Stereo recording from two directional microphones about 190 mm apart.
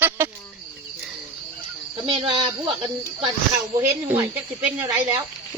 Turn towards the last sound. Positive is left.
turn(degrees=-20)  # may be behind; listen again after turning